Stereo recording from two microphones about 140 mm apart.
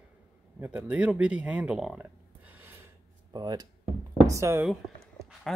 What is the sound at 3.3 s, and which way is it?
Speech, 30° right (ahead or behind).